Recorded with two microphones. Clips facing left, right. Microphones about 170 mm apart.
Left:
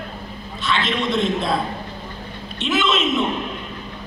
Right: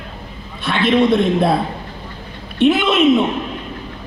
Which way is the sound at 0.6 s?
55° right (ahead or behind).